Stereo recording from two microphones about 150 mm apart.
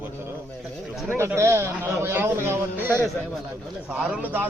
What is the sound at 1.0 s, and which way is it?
A man's voice, 15° right (ahead or behind).